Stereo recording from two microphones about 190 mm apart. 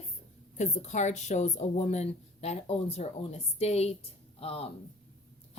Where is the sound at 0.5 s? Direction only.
35° left (ahead or behind).